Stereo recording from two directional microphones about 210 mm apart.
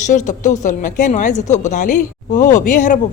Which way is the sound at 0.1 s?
35° left (ahead or behind).